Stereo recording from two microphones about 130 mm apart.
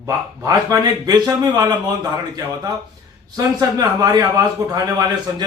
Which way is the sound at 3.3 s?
30° right (ahead or behind).